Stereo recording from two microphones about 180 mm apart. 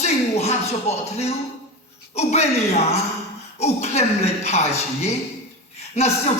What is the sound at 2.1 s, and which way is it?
Speech, 35° left (ahead or behind).